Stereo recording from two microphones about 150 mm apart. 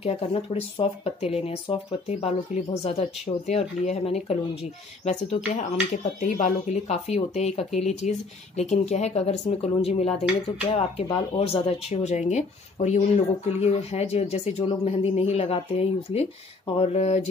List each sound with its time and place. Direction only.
0.0 s speech: 40° left (ahead or behind)